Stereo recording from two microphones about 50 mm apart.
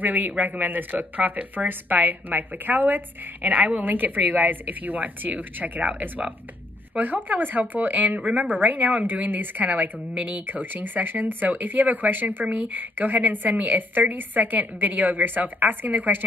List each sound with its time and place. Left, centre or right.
0.0 s speech: right